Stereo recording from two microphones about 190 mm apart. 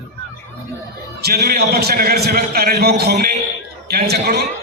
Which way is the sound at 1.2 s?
55° right (ahead or behind).